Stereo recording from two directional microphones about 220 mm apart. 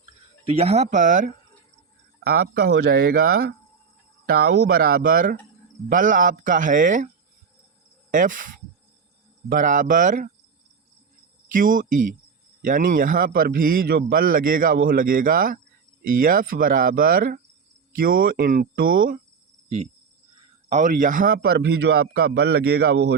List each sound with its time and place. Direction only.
0.4 s a man's voice: 30° right (ahead or behind)
8.1 s a man's voice: 35° right (ahead or behind)
9.5 s a man's voice: 35° right (ahead or behind)
11.5 s a man's voice: 40° right (ahead or behind)
20.3 s a man's voice: 30° right (ahead or behind); by 23.1 s 50° right (ahead or behind)